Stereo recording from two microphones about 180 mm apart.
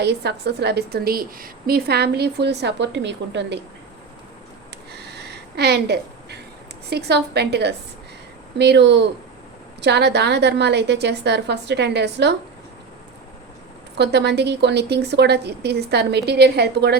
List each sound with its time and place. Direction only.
0.0 s a woman's voice: 70° right (ahead or behind)
4.9 s a sound: 65° right (ahead or behind)
6.9 s a woman's voice: 65° right (ahead or behind)
13.9 s a woman's voice: 70° right (ahead or behind)